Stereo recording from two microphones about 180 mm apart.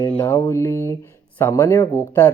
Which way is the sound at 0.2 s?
15° left (ahead or behind).